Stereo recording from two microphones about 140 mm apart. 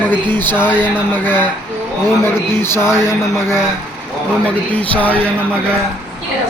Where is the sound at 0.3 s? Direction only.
15° left (ahead or behind).